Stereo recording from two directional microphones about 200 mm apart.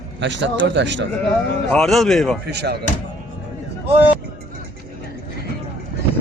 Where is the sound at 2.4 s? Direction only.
55° right (ahead or behind).